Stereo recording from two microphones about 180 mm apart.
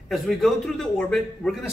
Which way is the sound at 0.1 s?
Centre (ahead or behind).